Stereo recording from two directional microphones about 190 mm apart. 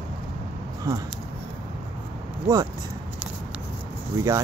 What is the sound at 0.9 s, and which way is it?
Speech, 15° right (ahead or behind).